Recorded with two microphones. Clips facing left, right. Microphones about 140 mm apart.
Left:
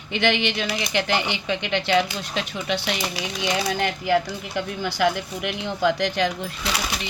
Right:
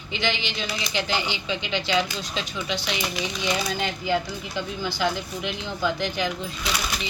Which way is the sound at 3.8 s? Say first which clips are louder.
Left 4 dB; 70° left (ahead or behind).